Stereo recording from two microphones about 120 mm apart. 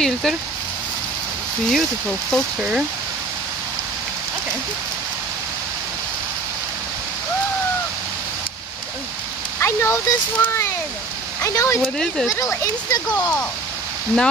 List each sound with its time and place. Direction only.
0.0 s speech: 5° left (ahead or behind)
1.7 s speech: 5° left (ahead or behind)
9.6 s speech: 20° left (ahead or behind)
11.8 s speech: centre (ahead or behind)
12.3 s speech: 25° left (ahead or behind)